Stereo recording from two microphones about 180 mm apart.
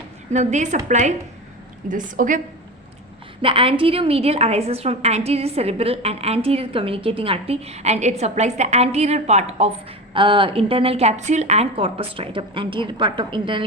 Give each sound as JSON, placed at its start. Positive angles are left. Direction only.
{"t": 0.3, "sound": "a woman's voice", "side_deg": -40}
{"t": 3.4, "sound": "a woman's voice", "side_deg": -30}